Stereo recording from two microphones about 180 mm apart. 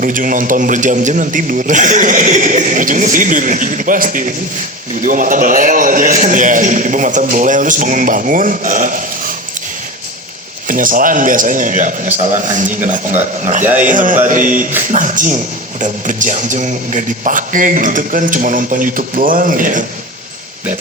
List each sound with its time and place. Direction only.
0.0 s a man's voice: 50° right (ahead or behind)
10.7 s a man's voice: 50° right (ahead or behind)